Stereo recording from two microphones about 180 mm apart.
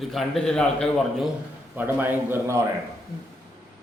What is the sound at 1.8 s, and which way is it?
Speech, 10° right (ahead or behind).